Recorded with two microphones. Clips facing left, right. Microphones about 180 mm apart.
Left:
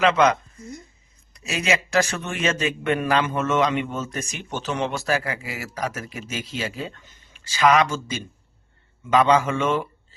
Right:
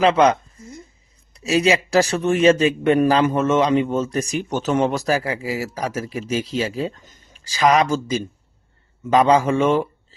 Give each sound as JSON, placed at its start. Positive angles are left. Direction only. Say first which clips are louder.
{"t": 0.0, "sound": "speech", "louder": "right 3 dB", "side_deg": -30}